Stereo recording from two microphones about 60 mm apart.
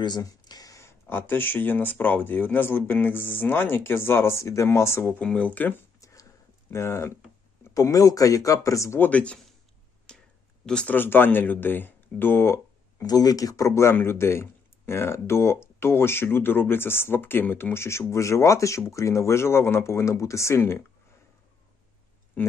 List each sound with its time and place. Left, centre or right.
0.2 s a sound: left
0.8 s speech: left
5.2 s speech: left
5.9 s a sound: left
6.7 s speech: left
7.7 s speech: left
9.0 s speech: left
10.1 s a sound: centre
10.6 s speech: centre
10.9 s speech: left
13.0 s speech: left
13.9 s speech: left